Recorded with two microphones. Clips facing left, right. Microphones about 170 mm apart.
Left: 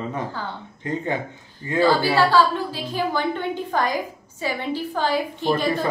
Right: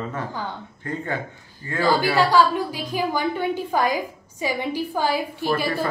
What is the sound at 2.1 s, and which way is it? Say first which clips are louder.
A woman's voice: even; 15° right (ahead or behind).